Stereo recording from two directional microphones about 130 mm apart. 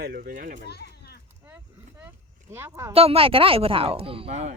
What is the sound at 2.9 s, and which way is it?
Speech, 50° right (ahead or behind).